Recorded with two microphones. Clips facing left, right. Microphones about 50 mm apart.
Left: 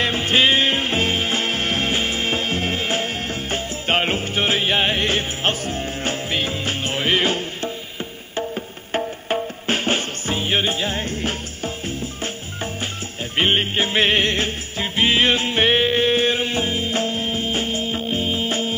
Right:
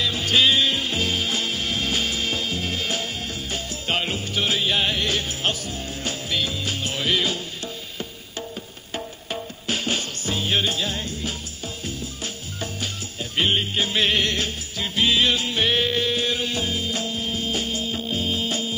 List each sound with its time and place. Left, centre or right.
0.0 s music: left